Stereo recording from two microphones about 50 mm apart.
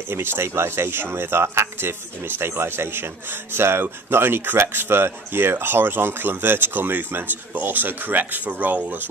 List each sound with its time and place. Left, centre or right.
0.1 s speech: right